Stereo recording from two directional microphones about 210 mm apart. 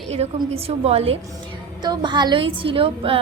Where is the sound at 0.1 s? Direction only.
30° right (ahead or behind).